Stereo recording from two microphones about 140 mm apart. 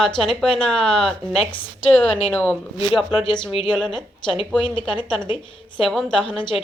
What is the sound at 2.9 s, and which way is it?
Speech, 5° right (ahead or behind).